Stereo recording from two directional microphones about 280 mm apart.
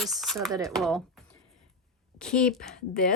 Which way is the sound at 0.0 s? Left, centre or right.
Centre.